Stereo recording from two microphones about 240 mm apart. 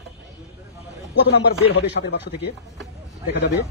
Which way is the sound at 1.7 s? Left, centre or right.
Left.